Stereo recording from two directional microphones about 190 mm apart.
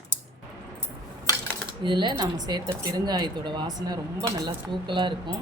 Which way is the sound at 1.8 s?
25° right (ahead or behind).